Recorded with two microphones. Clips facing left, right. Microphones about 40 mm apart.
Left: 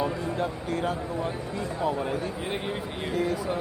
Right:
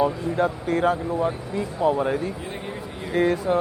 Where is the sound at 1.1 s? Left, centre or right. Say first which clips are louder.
Right 6 dB; right.